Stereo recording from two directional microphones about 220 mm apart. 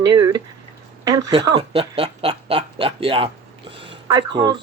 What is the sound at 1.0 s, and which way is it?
Speech, 20° right (ahead or behind).